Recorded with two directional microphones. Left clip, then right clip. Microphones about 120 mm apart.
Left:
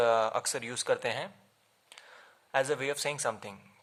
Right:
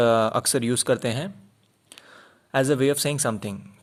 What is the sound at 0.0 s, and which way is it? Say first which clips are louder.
Speech: right 7 dB; 35° right (ahead or behind).